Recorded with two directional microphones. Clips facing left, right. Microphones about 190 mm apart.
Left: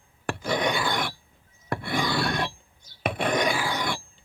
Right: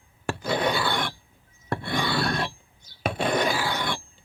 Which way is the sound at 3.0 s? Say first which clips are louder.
Right 1 dB; 30° right (ahead or behind).